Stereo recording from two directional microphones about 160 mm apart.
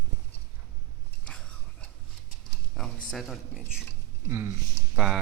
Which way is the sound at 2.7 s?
5° left (ahead or behind).